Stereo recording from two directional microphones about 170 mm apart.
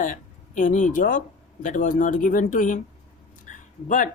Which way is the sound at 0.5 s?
50° left (ahead or behind).